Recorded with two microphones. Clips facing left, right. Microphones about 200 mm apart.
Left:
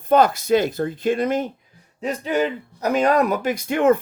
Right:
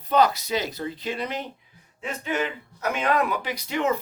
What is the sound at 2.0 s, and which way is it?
Speech, 35° left (ahead or behind).